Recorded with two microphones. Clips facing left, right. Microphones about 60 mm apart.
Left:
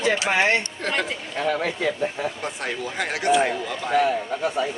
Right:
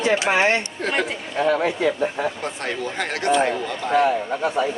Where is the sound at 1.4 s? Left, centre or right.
Centre.